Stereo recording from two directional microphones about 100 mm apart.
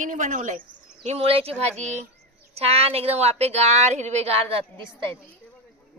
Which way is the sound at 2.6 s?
85° right.